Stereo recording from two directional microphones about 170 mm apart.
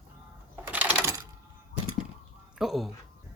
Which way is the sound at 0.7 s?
10° right (ahead or behind).